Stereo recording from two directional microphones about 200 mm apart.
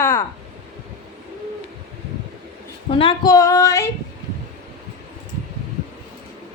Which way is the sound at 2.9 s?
25° left (ahead or behind).